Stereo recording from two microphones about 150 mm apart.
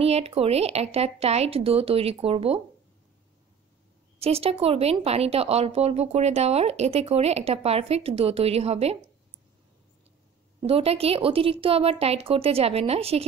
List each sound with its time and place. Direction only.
0.0 s speech: 40° right (ahead or behind)
4.2 s speech: 40° right (ahead or behind)
10.7 s speech: 40° right (ahead or behind)